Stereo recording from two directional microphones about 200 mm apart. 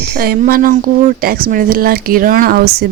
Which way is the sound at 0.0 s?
50° right (ahead or behind).